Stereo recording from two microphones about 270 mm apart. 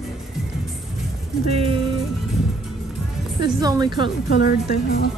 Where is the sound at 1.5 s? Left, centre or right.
Right.